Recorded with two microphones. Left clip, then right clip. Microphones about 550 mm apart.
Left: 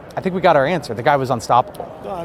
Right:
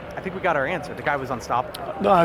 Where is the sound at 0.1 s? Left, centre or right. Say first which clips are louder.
Left 9 dB; left.